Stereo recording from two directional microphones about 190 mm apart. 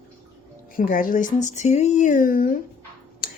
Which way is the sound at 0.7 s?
45° left (ahead or behind).